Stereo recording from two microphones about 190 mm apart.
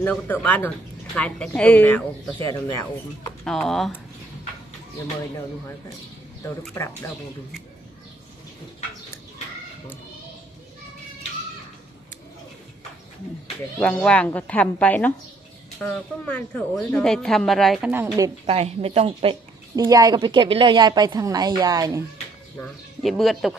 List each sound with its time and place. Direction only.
0.0 s speech: 5° left (ahead or behind)
3.4 s speech: centre (ahead or behind)
13.7 s speech: 5° left (ahead or behind)
18.4 s speech: 35° right (ahead or behind)
19.7 s a woman's voice: 20° right (ahead or behind)
22.6 s speech: centre (ahead or behind)